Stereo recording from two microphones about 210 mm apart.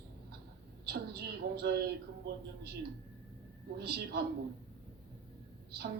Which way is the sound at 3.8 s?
50° right (ahead or behind).